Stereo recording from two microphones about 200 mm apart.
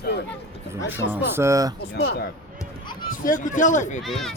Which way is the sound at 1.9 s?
55° left (ahead or behind).